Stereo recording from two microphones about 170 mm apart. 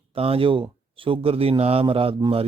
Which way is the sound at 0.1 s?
35° right (ahead or behind).